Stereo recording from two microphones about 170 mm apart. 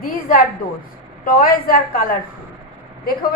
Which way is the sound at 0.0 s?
55° left (ahead or behind).